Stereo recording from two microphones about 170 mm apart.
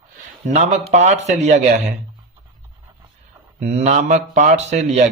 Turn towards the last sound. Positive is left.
turn(degrees=-45)  # may be behind; listen again after turning